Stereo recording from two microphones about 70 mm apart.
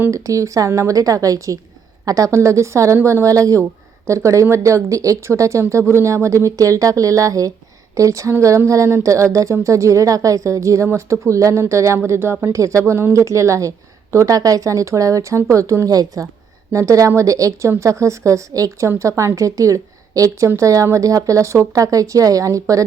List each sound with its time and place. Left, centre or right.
0.1 s a woman's voice: right
15.9 s speech: right
16.7 s a woman's voice: right